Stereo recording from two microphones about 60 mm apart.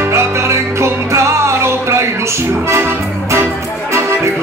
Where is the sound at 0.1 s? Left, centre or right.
Right.